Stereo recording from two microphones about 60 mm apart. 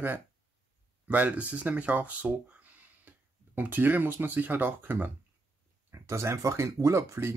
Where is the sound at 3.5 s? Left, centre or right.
Right.